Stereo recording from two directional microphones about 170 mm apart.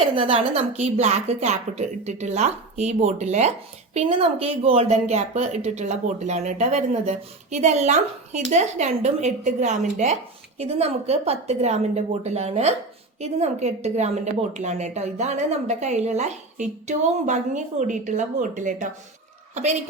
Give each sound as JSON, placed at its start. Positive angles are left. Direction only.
{"t": 0.2, "sound": "a woman's voice", "side_deg": -35}